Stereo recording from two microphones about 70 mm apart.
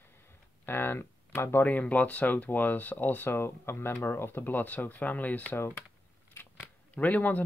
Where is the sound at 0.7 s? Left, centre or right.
Left.